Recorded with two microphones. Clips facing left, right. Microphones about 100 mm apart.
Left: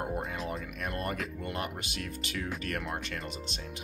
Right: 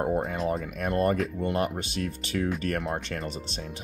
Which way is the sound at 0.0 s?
35° right (ahead or behind).